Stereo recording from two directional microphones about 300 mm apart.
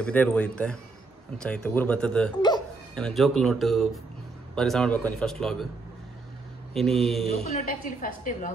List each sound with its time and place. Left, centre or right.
0.0 s speech: centre
6.7 s speech: centre
7.4 s a woman's voice: left